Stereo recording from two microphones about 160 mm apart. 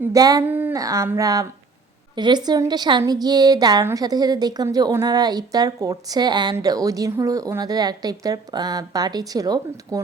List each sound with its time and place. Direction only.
0.0 s a woman's voice: 20° right (ahead or behind)
0.4 s a woman's voice: 10° right (ahead or behind)